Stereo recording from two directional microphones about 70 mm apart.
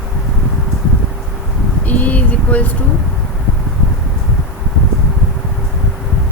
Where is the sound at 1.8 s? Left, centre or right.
Left.